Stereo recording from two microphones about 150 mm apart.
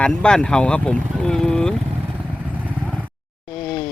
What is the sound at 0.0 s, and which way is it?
Speech, 5° left (ahead or behind).